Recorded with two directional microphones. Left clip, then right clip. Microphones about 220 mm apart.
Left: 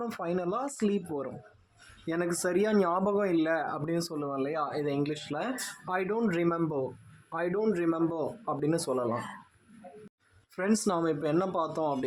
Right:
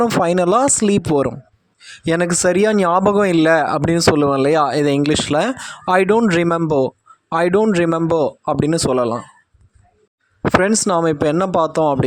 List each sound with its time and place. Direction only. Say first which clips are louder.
0.0 s speech: right 18 dB; 45° right (ahead or behind)
10.6 s speech: right 8 dB; 40° right (ahead or behind)